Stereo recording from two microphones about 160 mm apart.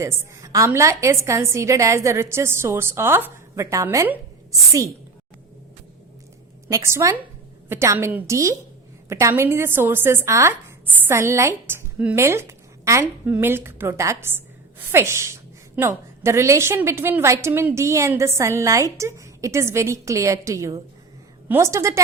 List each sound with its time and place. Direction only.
0.0 s speech: 15° right (ahead or behind)
6.7 s a woman's voice: 20° right (ahead or behind)